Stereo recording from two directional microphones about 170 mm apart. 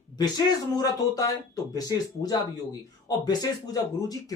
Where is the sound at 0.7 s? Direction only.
20° left (ahead or behind).